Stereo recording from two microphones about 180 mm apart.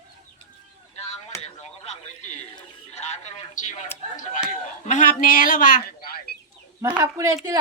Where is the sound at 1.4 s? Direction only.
40° left (ahead or behind).